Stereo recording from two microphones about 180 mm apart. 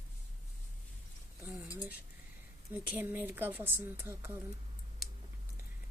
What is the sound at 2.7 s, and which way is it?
Speech, 10° right (ahead or behind).